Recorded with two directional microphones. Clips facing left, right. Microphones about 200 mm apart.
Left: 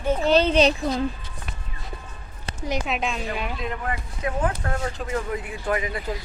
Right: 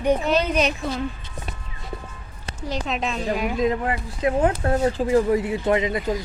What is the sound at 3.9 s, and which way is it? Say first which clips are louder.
Speech: right 6 dB; 25° right (ahead or behind).